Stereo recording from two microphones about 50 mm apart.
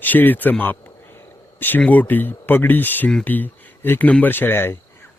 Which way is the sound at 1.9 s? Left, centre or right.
Left.